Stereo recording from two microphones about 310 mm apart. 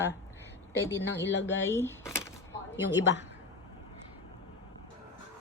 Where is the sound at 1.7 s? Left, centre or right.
Centre.